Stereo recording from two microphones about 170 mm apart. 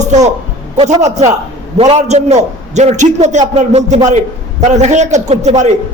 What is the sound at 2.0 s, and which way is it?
A man's voice, 40° right (ahead or behind).